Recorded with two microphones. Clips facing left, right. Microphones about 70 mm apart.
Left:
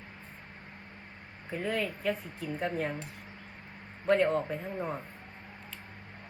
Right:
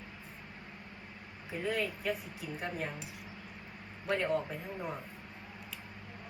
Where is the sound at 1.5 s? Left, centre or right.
Centre.